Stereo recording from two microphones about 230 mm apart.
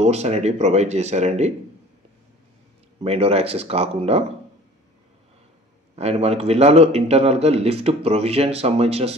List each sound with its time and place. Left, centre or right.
0.0 s a man's voice: right
3.0 s a man's voice: right
5.9 s a man's voice: right